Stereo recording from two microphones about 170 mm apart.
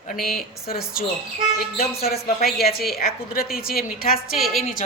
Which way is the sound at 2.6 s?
65° left (ahead or behind).